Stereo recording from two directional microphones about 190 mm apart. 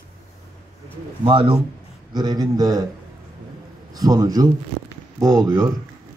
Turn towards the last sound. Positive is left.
turn(degrees=-15)  # may be behind; listen again after turning